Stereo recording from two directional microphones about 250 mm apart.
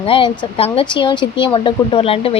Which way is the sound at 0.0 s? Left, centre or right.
Left.